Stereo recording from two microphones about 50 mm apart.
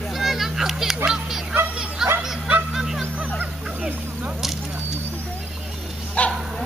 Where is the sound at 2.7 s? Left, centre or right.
Centre.